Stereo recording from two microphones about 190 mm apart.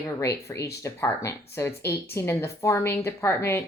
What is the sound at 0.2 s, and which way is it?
Speech, 15° left (ahead or behind).